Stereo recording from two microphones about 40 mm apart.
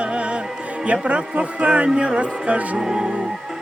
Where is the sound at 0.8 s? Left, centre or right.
Right.